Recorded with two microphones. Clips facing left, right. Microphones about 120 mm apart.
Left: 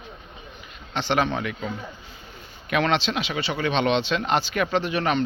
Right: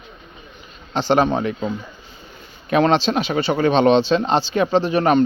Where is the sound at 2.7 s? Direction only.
35° right (ahead or behind).